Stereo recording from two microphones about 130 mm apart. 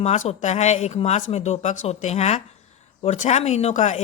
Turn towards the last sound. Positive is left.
turn(degrees=65)  # may be behind; listen again after turning